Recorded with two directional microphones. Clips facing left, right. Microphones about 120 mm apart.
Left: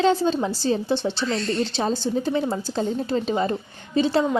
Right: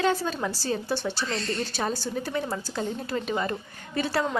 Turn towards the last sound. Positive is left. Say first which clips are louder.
# left 7 dB
turn(degrees=20)  # may be behind; listen again after turning